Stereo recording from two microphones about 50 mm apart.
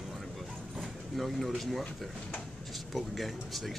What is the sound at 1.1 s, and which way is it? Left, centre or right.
Speech, centre.